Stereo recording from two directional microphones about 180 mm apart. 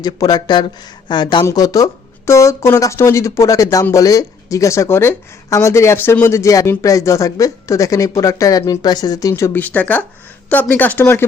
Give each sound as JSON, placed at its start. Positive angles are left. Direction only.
{"t": 0.0, "sound": "speech", "side_deg": 20}